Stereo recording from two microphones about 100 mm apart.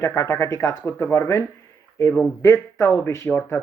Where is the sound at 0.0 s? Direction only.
30° left (ahead or behind).